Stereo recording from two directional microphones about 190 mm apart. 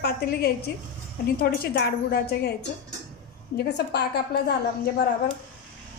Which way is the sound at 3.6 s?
60° left (ahead or behind).